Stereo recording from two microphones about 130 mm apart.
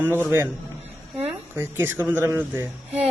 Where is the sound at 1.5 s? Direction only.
15° right (ahead or behind).